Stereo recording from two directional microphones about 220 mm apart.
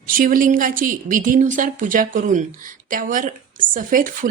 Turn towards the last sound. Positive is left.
turn(degrees=-35)  # may be behind; listen again after turning